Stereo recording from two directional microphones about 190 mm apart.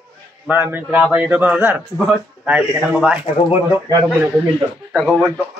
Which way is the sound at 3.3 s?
30° left (ahead or behind).